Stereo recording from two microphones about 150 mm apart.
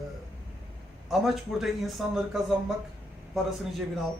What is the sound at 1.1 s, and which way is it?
A man's voice, centre (ahead or behind).